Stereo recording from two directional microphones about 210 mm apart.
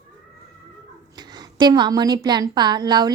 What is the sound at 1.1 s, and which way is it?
A woman's voice, 20° right (ahead or behind).